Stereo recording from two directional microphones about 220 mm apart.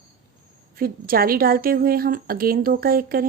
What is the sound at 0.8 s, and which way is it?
A woman's voice, 40° right (ahead or behind).